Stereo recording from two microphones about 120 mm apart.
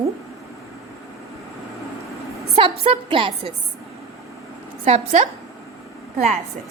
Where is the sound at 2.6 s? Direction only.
50° right (ahead or behind).